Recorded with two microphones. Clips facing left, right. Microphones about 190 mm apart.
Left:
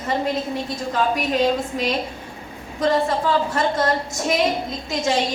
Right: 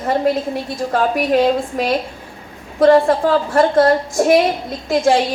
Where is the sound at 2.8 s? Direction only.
55° right (ahead or behind).